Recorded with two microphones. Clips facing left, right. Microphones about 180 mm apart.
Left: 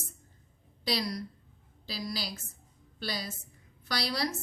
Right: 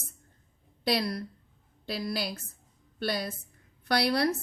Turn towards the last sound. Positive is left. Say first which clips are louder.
# right 7 dB
turn(degrees=-60)  # may be behind; listen again after turning